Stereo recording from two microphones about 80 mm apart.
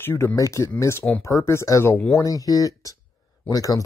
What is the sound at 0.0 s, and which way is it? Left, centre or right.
Speech, left.